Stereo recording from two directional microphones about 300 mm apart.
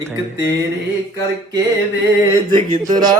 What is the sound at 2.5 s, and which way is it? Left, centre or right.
Speech, centre.